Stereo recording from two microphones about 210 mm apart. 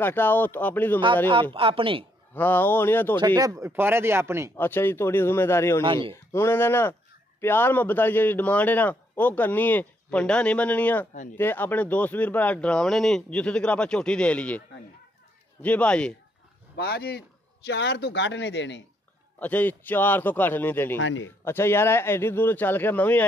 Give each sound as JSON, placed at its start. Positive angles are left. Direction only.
{"t": 0.0, "sound": "a man's voice", "side_deg": 10}
{"t": 1.3, "sound": "speech", "side_deg": -25}
{"t": 2.3, "sound": "a man's voice", "side_deg": 10}
{"t": 3.2, "sound": "speech", "side_deg": -20}
{"t": 4.6, "sound": "a man's voice", "side_deg": 10}
{"t": 15.6, "sound": "speech", "side_deg": 5}
{"t": 16.7, "sound": "speech", "side_deg": 50}
{"t": 19.4, "sound": "a man's voice", "side_deg": 10}
{"t": 21.0, "sound": "speech", "side_deg": 65}
{"t": 21.5, "sound": "a man's voice", "side_deg": 10}